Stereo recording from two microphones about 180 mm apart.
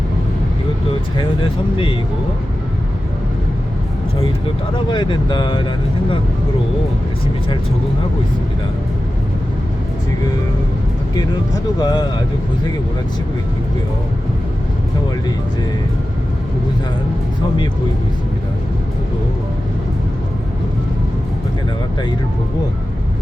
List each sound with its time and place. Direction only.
1.7 s speech: 30° left (ahead or behind)
4.9 s speech: 25° left (ahead or behind)
11.1 s speech: 20° left (ahead or behind)